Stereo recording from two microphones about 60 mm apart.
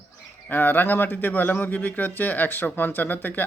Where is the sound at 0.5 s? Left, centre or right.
Left.